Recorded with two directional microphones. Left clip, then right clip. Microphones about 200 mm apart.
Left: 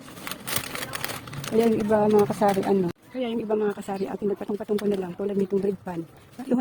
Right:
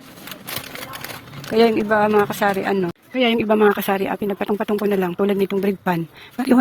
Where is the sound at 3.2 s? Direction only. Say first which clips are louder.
Right 10 dB; 20° right (ahead or behind).